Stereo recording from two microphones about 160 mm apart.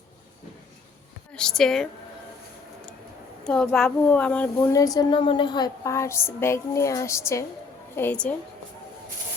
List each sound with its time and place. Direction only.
1.3 s a woman's voice: 5° left (ahead or behind)
3.4 s speech: 5° left (ahead or behind)
4.7 s a woman's voice: 20° left (ahead or behind)